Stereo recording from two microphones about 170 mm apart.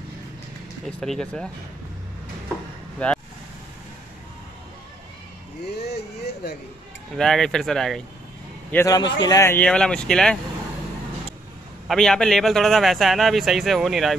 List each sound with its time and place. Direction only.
1.0 s speech: 5° left (ahead or behind)
3.0 s speech: 5° left (ahead or behind)
7.2 s speech: 5° left (ahead or behind)
8.7 s a man's voice: 20° left (ahead or behind); by 10.4 s 5° left (ahead or behind)
11.9 s speech: 5° left (ahead or behind)